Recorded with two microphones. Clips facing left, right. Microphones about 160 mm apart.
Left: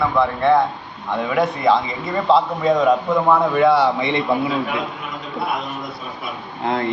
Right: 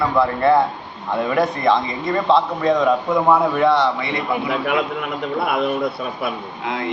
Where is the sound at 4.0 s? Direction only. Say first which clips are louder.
Left 4 dB; 25° left (ahead or behind).